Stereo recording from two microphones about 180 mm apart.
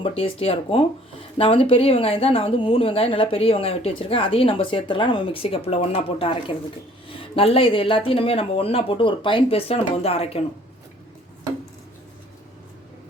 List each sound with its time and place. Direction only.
0.0 s speech: 30° left (ahead or behind)